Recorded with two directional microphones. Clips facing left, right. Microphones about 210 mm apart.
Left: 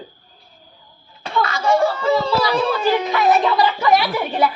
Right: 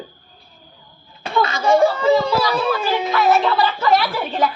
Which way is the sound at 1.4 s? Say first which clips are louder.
Right 2 dB; 20° right (ahead or behind).